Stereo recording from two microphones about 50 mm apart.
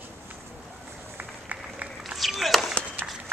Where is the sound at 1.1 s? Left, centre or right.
Right.